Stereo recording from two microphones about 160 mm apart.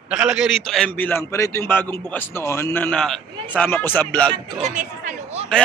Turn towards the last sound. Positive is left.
turn(degrees=-50)  # may be behind; listen again after turning